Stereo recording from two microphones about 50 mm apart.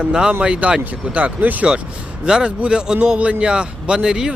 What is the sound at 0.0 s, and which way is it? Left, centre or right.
Speech, centre.